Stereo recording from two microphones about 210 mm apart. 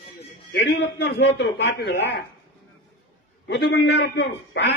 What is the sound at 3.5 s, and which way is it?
A man's voice, 55° left (ahead or behind).